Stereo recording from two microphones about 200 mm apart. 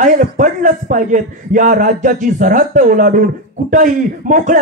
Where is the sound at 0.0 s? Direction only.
40° right (ahead or behind).